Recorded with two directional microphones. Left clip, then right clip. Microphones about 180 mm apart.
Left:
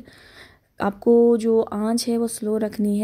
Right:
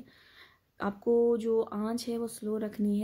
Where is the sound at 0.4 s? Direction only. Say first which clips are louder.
Left 10 dB; 40° left (ahead or behind).